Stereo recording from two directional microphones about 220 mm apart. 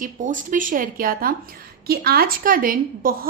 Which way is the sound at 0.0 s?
35° right (ahead or behind).